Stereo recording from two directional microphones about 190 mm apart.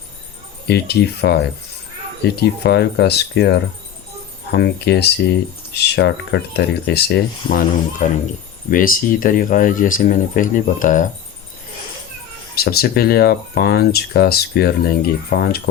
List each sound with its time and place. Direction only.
0.7 s speech: 60° left (ahead or behind); by 11.1 s 45° left (ahead or behind)
12.5 s speech: 55° left (ahead or behind)